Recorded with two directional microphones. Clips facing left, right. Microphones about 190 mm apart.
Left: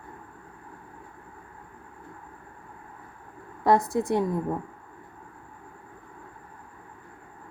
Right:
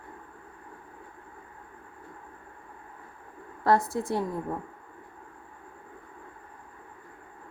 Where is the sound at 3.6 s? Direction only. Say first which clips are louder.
Left 2 dB; 15° left (ahead or behind).